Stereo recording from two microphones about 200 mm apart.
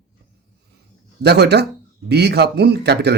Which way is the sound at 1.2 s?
55° right (ahead or behind).